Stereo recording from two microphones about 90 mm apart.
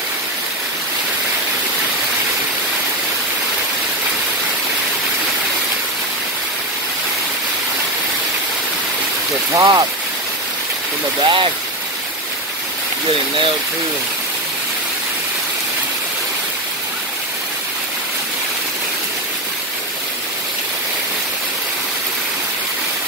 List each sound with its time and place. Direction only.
9.5 s speech: 45° right (ahead or behind)
11.2 s speech: 65° right (ahead or behind)